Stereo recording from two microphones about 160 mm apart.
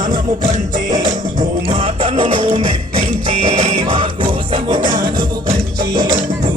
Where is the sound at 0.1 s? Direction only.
25° right (ahead or behind).